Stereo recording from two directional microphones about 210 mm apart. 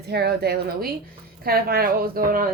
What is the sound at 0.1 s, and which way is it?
A woman's voice, 50° right (ahead or behind).